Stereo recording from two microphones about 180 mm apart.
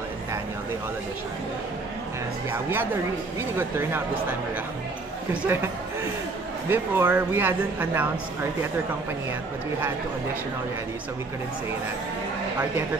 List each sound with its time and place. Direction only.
2.5 s speech: 10° right (ahead or behind)
6.7 s speech: 10° right (ahead or behind)